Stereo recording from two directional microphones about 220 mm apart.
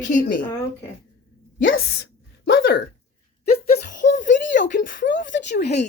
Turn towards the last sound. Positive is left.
turn(degrees=50)  # may be behind; listen again after turning